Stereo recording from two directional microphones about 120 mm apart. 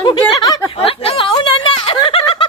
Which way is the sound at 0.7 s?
55° left (ahead or behind).